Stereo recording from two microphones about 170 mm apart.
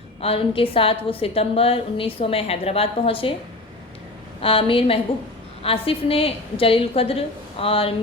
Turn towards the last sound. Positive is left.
turn(degrees=35)  # may be behind; listen again after turning